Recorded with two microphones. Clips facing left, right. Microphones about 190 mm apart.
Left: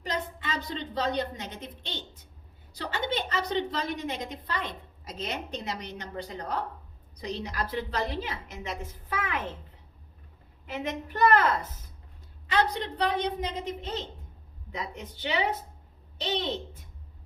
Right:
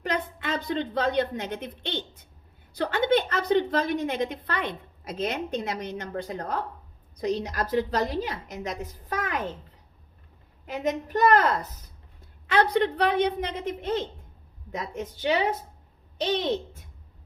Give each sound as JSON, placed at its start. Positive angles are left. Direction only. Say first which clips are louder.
{"t": 0.0, "sound": "a woman's voice", "louder": "right 4 dB", "side_deg": -55}
{"t": 10.8, "sound": "a woman's voice", "louder": "right 3 dB", "side_deg": -40}
{"t": 12.5, "sound": "a woman's voice", "louder": "right 5 dB", "side_deg": -60}